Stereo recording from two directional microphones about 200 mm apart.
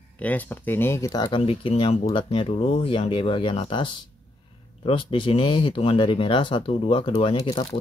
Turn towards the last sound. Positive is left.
turn(degrees=25)  # may be behind; listen again after turning